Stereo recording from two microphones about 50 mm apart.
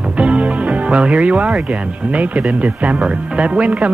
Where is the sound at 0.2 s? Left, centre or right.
Right.